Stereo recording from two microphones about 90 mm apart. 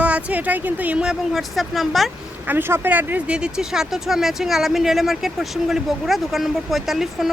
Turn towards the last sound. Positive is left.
turn(degrees=-5)  # may be behind; listen again after turning